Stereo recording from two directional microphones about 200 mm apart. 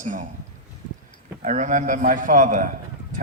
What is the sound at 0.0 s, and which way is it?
Speech, 40° right (ahead or behind).